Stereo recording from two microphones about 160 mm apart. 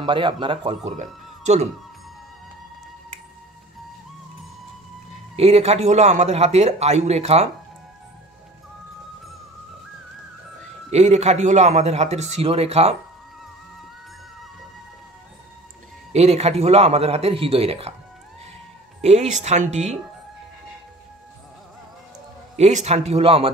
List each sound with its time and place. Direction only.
0.0 s a man's voice: 30° right (ahead or behind)
0.8 s speech: 50° right (ahead or behind)
5.3 s speech: 40° right (ahead or behind)
10.9 s speech: 45° right (ahead or behind)
16.1 s a man's voice: 45° right (ahead or behind)
18.9 s speech: 45° right (ahead or behind)
22.6 s a man's voice: 45° right (ahead or behind)